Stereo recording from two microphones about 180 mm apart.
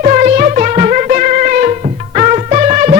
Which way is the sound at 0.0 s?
40° right (ahead or behind).